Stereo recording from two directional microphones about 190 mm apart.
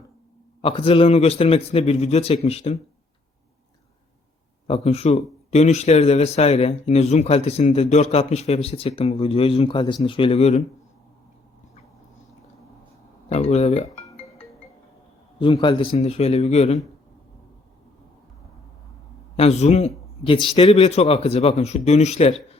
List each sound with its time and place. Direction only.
0.6 s speech: 30° left (ahead or behind)
4.6 s speech: 30° left (ahead or behind)
13.3 s speech: 35° left (ahead or behind)
15.4 s speech: 25° left (ahead or behind)
19.4 s a man's voice: 35° left (ahead or behind)